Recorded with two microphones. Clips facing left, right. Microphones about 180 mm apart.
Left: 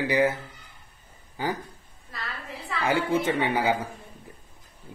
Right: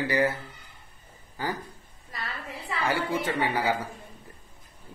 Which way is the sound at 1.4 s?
20° left (ahead or behind).